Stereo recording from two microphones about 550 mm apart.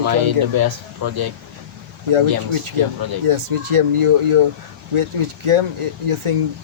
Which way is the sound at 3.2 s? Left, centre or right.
Right.